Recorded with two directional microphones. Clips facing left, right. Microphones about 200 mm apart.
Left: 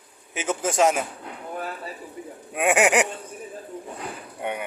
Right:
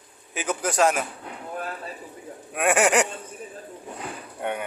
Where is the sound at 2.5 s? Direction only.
15° left (ahead or behind).